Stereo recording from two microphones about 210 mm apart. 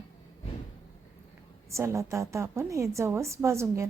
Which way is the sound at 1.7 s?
15° right (ahead or behind).